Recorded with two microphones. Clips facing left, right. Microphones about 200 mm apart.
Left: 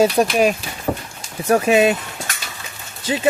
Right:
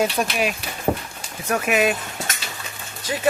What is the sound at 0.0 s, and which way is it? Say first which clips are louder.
Speech: left 7 dB; 40° left (ahead or behind).